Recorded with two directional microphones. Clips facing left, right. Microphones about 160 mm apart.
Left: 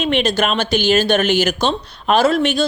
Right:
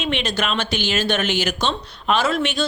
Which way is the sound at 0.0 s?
45° left (ahead or behind).